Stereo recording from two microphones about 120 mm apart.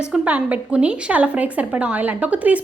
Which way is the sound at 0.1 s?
15° right (ahead or behind).